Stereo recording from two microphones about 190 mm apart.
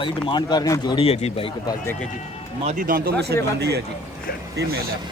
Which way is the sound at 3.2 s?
60° right (ahead or behind).